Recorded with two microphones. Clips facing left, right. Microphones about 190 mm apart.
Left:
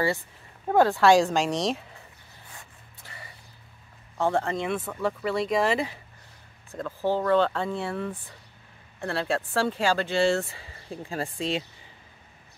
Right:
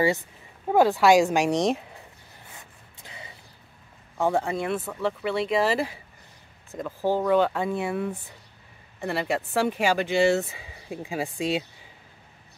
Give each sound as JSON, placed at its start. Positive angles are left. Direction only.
{"t": 0.7, "sound": "speech", "side_deg": -10}
{"t": 3.0, "sound": "a sound", "side_deg": -20}
{"t": 4.2, "sound": "speech", "side_deg": -10}
{"t": 6.7, "sound": "speech", "side_deg": -15}